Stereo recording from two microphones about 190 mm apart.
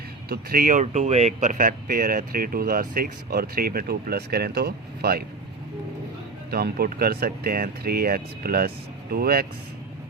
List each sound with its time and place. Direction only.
0.3 s speech: 50° right (ahead or behind)
6.5 s speech: 55° right (ahead or behind)